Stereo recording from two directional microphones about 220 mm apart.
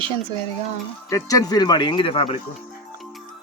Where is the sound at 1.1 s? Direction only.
15° left (ahead or behind).